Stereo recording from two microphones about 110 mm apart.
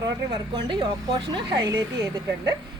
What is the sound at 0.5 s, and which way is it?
A woman's voice, 45° right (ahead or behind).